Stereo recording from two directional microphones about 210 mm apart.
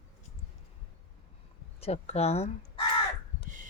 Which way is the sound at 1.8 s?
30° left (ahead or behind).